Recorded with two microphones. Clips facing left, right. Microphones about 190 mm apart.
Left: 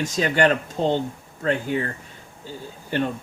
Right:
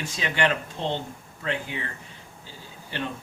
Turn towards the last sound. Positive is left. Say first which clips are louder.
# left 8 dB
turn(degrees=45)  # may be behind; listen again after turning